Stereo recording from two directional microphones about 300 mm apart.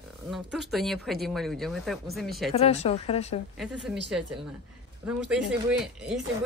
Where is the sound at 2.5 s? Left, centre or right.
Left.